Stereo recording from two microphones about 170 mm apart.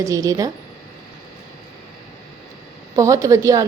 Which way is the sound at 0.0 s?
20° right (ahead or behind).